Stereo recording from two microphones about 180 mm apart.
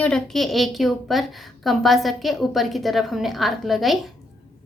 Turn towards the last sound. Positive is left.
turn(degrees=0)  # may be behind; listen again after turning